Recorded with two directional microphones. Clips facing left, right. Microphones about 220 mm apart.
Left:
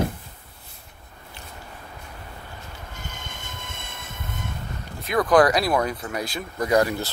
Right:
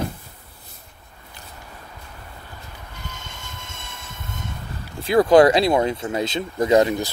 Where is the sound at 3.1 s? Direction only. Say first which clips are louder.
Even; 55° left (ahead or behind).